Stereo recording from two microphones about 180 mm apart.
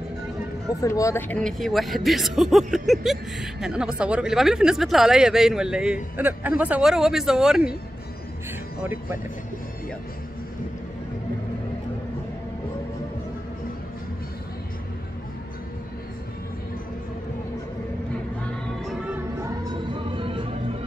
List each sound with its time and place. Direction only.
0.7 s speech: 15° left (ahead or behind); by 7.7 s 5° right (ahead or behind)
19.7 s music: 30° right (ahead or behind)